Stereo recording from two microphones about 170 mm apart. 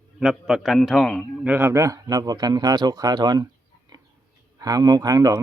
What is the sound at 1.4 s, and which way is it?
Speech, 10° right (ahead or behind).